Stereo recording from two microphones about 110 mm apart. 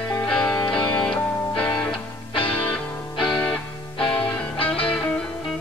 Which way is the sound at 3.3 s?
5° left (ahead or behind).